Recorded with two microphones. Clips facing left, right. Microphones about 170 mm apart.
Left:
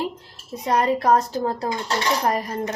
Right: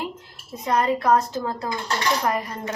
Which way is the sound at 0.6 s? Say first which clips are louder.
Left 1 dB; 35° left (ahead or behind).